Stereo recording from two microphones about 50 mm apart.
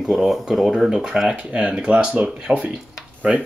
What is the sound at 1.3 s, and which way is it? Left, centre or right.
Speech, right.